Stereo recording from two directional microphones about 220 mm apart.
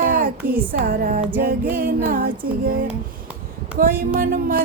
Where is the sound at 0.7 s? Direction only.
40° right (ahead or behind).